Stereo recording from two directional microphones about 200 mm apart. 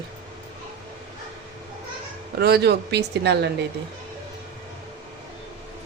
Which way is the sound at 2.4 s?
55° right (ahead or behind).